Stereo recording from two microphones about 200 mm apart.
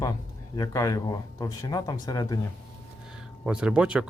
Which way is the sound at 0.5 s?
20° left (ahead or behind).